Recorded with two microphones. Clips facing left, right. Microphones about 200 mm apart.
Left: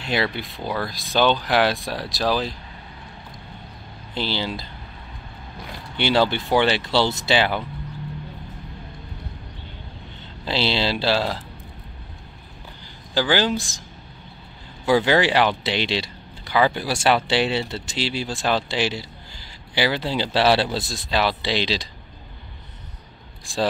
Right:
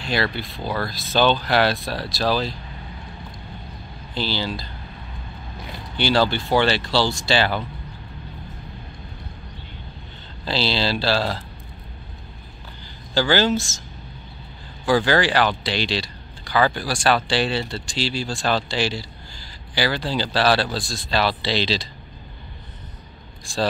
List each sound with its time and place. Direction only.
0.1 s speech: 20° left (ahead or behind)
4.1 s speech: 20° left (ahead or behind)
5.9 s speech: 20° left (ahead or behind)
10.4 s speech: 20° left (ahead or behind)
13.1 s speech: 15° left (ahead or behind)
14.9 s speech: 20° left (ahead or behind)